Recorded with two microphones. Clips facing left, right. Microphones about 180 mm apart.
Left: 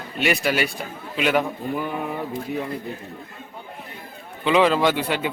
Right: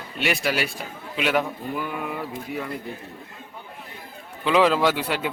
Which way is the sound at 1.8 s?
25° left (ahead or behind).